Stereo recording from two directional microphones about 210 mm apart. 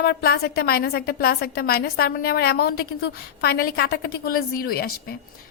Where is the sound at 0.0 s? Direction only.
50° left (ahead or behind).